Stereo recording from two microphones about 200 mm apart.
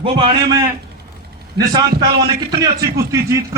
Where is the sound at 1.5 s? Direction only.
20° right (ahead or behind).